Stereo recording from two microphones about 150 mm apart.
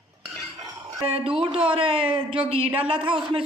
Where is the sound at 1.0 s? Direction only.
40° right (ahead or behind).